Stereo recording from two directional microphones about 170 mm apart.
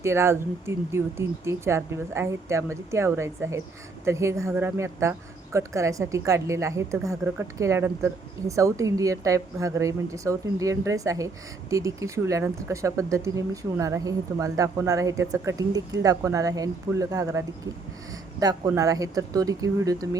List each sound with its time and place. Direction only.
0.0 s speech: 15° right (ahead or behind)